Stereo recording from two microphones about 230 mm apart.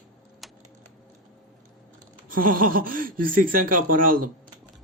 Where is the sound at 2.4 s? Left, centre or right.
Right.